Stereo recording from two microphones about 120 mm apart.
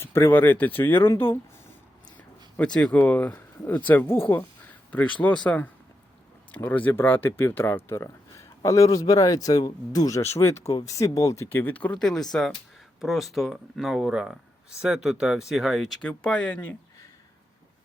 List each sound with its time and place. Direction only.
0.0 s speech: 20° left (ahead or behind)
2.1 s speech: 10° left (ahead or behind); by 11.4 s 30° left (ahead or behind)
11.4 s speech: 15° left (ahead or behind)